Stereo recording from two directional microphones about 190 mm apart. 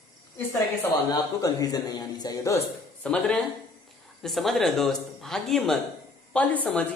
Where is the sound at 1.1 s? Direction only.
20° left (ahead or behind).